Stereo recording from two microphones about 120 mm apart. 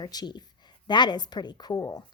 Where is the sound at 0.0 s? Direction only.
35° left (ahead or behind).